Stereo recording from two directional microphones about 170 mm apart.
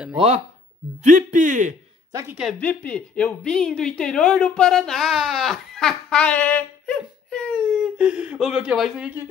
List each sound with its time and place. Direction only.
1.0 s a man's voice: 50° right (ahead or behind)
2.6 s speech: 10° left (ahead or behind)
8.0 s speech: 5° right (ahead or behind)